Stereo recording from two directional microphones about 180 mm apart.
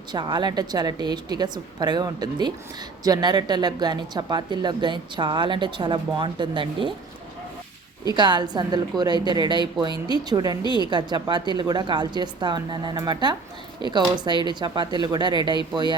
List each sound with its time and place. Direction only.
0.1 s a woman's voice: 25° right (ahead or behind)
8.1 s a woman's voice: 25° right (ahead or behind)